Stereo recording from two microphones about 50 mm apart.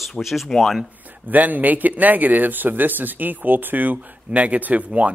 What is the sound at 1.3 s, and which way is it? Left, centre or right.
A man's voice, right.